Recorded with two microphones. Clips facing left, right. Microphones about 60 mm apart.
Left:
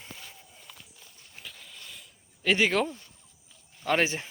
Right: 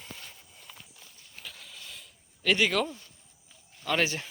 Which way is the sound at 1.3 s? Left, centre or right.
Centre.